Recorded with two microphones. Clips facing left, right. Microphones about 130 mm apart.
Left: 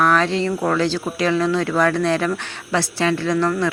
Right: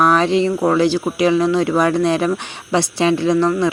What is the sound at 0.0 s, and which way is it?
Speech, 15° right (ahead or behind).